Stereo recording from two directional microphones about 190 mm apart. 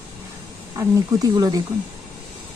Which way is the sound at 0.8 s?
15° right (ahead or behind).